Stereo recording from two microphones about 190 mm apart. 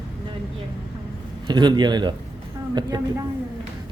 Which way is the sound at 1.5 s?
25° right (ahead or behind).